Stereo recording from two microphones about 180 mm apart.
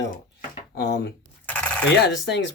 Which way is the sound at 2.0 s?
75° left (ahead or behind).